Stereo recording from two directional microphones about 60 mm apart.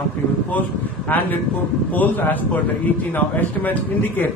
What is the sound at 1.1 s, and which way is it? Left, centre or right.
Speech, left.